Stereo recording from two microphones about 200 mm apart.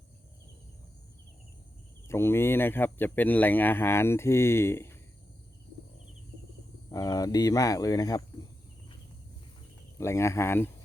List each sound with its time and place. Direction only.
2.0 s speech: 10° left (ahead or behind)
6.9 s speech: 20° left (ahead or behind)
10.0 s speech: 15° left (ahead or behind)